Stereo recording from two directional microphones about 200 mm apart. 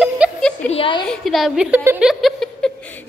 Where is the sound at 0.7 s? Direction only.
25° left (ahead or behind).